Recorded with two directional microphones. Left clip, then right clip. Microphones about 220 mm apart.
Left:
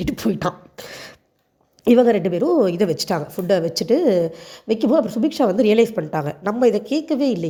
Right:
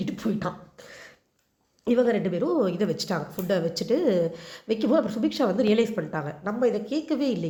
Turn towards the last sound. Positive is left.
turn(degrees=25)  # may be behind; listen again after turning